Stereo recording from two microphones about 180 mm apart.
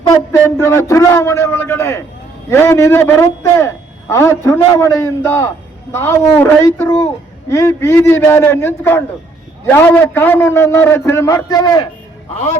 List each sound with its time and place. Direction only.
0.1 s a man's voice: 15° left (ahead or behind)